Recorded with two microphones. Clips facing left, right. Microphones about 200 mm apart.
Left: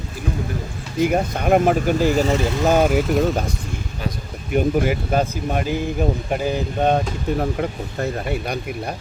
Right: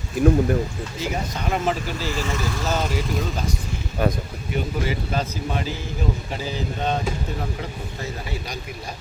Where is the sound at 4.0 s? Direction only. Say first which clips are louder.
Right 7 dB; 55° right (ahead or behind).